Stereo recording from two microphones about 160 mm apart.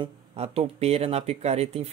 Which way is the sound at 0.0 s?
40° right (ahead or behind).